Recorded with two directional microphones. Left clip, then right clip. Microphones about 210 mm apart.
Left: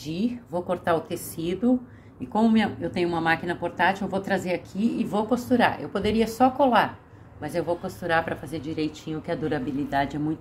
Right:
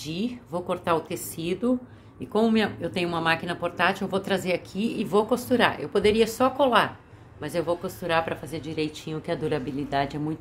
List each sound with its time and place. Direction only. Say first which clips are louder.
0.0 s a woman's voice: left 2 dB; 10° right (ahead or behind)